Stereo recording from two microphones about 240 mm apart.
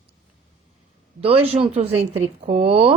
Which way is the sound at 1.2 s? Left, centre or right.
Right.